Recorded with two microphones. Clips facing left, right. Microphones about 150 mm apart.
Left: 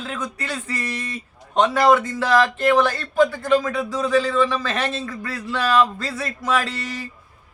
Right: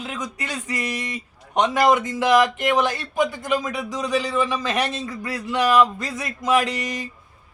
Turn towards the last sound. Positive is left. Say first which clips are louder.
# right 3 dB
turn(degrees=-15)  # may be behind; listen again after turning